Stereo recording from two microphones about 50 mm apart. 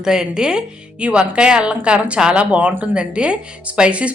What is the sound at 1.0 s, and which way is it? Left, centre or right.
Speech, right.